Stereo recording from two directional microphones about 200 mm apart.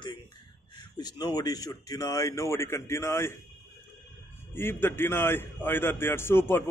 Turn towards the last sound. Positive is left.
turn(degrees=10)  # may be behind; listen again after turning